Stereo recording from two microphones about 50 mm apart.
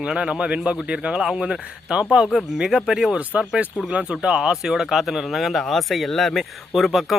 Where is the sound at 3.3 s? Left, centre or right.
Right.